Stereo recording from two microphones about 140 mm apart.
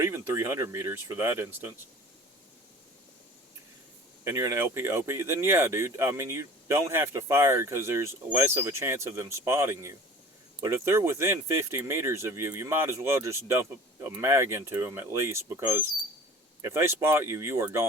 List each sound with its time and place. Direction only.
0.0 s speech: 20° right (ahead or behind)
4.2 s speech: 20° right (ahead or behind)